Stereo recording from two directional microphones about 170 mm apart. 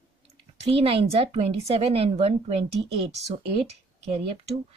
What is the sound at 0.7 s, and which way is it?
Speech, 35° right (ahead or behind).